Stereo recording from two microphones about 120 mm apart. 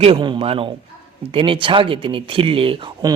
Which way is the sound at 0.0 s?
50° right (ahead or behind).